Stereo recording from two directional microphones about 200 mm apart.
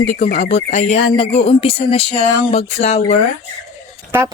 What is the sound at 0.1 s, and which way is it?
Speech, 35° left (ahead or behind).